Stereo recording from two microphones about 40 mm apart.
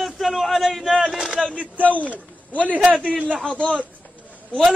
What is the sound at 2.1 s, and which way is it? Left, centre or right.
Speech, left.